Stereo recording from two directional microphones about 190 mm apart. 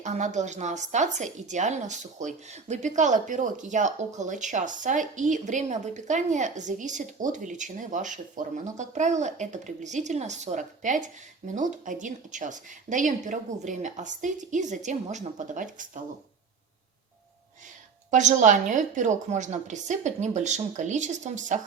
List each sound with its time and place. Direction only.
0.0 s speech: 40° right (ahead or behind)
18.1 s speech: 40° right (ahead or behind)